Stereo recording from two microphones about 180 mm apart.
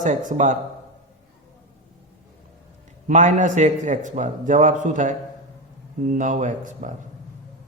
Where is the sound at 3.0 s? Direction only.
45° right (ahead or behind).